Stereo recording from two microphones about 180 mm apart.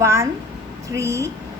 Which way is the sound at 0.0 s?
15° right (ahead or behind).